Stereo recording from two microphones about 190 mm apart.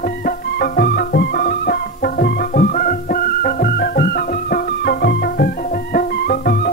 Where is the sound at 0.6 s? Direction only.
55° left (ahead or behind).